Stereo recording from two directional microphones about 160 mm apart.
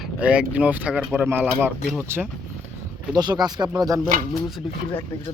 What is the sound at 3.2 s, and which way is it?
Speech, 25° right (ahead or behind).